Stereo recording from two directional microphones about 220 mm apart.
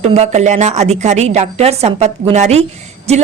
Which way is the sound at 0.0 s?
30° right (ahead or behind).